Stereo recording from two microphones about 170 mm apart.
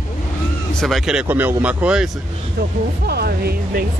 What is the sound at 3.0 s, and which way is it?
Speech, 65° right (ahead or behind).